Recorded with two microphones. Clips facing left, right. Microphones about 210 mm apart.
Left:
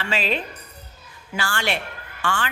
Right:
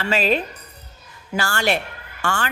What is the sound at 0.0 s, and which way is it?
A woman's voice, 40° right (ahead or behind).